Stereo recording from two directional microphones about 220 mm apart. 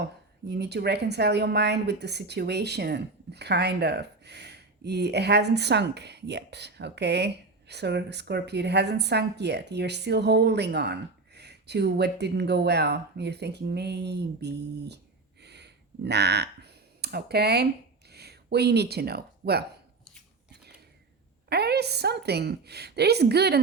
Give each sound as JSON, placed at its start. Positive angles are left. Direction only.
{"t": 0.0, "sound": "a woman's voice", "side_deg": -50}
{"t": 15.4, "sound": "a sound", "side_deg": -50}
{"t": 18.1, "sound": "speech", "side_deg": -45}
{"t": 21.5, "sound": "a woman's voice", "side_deg": -45}